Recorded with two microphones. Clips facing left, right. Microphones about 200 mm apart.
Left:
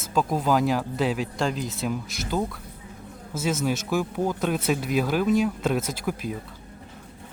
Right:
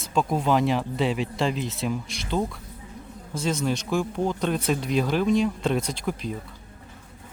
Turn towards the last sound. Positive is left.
turn(degrees=5)  # may be behind; listen again after turning